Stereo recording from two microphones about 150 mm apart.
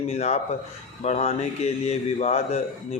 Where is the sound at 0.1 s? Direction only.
45° left (ahead or behind).